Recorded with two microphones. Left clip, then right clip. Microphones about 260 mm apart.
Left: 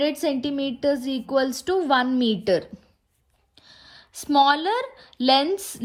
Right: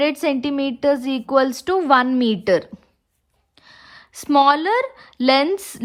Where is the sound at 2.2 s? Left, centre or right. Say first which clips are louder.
Right 4 dB; centre.